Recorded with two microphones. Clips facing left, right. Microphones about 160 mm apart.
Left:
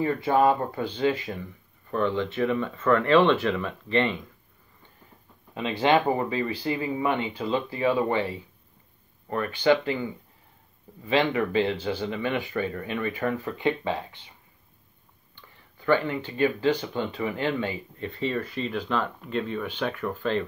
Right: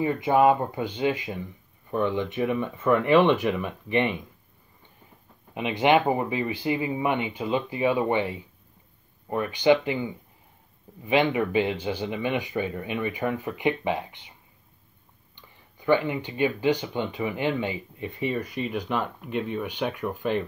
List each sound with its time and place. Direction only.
0.0 s speech: 15° right (ahead or behind)
5.5 s speech: 15° right (ahead or behind)
15.3 s speech: 15° right (ahead or behind)